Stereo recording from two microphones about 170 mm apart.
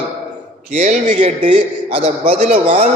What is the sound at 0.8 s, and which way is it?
Speech, 45° right (ahead or behind).